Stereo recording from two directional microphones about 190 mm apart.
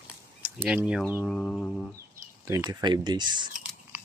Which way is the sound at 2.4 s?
20° right (ahead or behind).